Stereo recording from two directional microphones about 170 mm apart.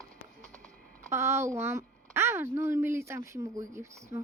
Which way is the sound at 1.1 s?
15° right (ahead or behind).